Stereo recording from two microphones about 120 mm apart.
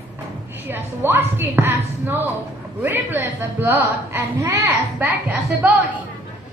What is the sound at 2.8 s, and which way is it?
A woman's voice, 15° right (ahead or behind).